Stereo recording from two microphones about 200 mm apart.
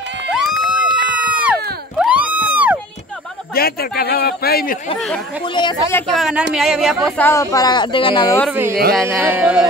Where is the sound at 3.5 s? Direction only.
50° left (ahead or behind).